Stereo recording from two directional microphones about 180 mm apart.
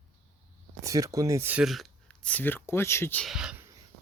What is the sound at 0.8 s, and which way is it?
Speech, 20° right (ahead or behind).